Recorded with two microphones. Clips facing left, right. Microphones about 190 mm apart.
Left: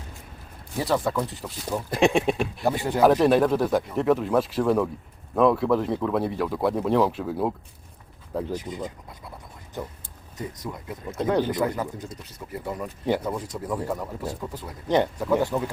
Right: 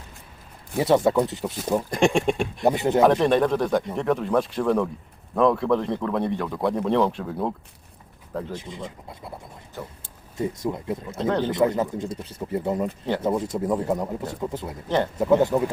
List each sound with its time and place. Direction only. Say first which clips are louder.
0.8 s speech: right 6 dB; 25° right (ahead or behind)
1.9 s speech: left 2 dB; centre (ahead or behind)
2.6 s speech: right 5 dB; 20° right (ahead or behind)
3.0 s speech: left 1 dB; 5° left (ahead or behind)
8.5 s speech: left 3 dB; 25° right (ahead or behind)
9.8 s speech: left 2 dB; 15° left (ahead or behind)
10.3 s speech: right 8 dB; 25° right (ahead or behind)
11.2 s speech: left 1 dB; 10° left (ahead or behind)
11.5 s speech: right 5 dB; 25° right (ahead or behind)
14.8 s speech: left 2 dB; 15° left (ahead or behind)
15.2 s speech: right 4 dB; 20° right (ahead or behind)